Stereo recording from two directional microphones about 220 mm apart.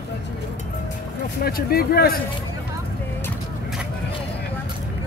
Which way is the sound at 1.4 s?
45° left (ahead or behind).